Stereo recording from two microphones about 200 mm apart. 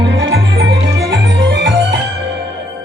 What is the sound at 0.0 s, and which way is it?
Music, 60° right (ahead or behind).